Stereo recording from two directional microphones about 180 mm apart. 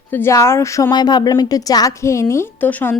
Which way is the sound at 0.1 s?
15° left (ahead or behind).